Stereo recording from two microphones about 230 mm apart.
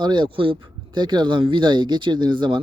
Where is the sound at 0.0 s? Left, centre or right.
Centre.